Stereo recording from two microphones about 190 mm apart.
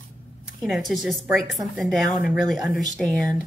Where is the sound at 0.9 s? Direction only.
Centre (ahead or behind).